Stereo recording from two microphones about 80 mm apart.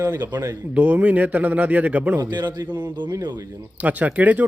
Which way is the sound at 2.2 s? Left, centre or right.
Right.